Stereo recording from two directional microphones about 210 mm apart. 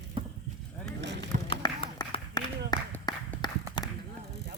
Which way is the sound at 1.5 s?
20° left (ahead or behind).